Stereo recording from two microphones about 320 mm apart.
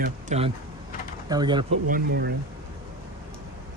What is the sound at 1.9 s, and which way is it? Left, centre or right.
Speech, right.